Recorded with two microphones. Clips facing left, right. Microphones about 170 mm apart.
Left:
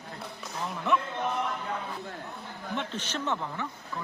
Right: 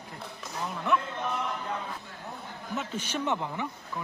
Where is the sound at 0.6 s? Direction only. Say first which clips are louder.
Even; centre (ahead or behind).